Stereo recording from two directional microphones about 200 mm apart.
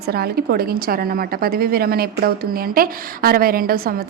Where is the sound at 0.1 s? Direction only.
50° right (ahead or behind).